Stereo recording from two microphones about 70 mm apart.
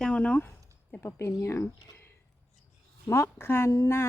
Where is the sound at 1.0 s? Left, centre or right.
Left.